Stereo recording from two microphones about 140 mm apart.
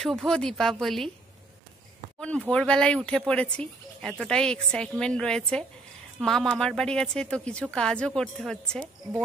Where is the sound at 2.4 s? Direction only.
5° left (ahead or behind).